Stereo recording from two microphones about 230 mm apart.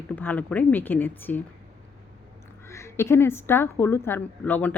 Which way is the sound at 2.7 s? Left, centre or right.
Centre.